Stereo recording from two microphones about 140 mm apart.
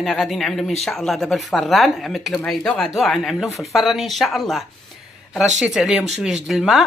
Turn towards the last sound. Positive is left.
turn(degrees=0)  # may be behind; listen again after turning